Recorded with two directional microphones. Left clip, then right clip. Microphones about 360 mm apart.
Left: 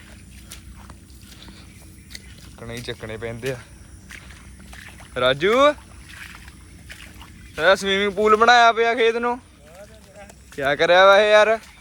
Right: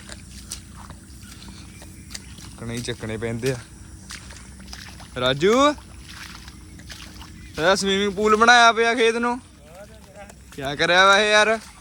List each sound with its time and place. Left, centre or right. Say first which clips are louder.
2.1 s speech: right 1 dB; centre
4.7 s boat: left 3 dB; centre
6.1 s boat: even; centre
6.8 s speech: even; centre